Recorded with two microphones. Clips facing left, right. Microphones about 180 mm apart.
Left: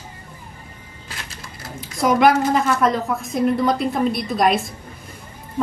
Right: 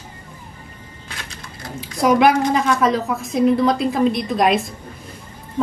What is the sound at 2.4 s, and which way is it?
A woman's voice, 5° left (ahead or behind).